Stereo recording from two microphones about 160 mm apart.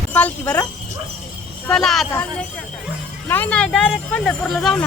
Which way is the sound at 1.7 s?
Centre (ahead or behind).